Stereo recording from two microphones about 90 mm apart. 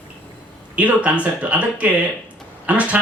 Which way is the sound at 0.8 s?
15° right (ahead or behind).